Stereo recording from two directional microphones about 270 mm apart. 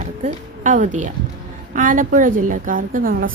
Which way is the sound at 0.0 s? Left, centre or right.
Right.